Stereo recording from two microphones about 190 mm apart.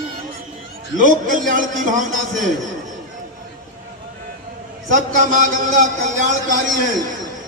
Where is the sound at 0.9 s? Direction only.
45° right (ahead or behind).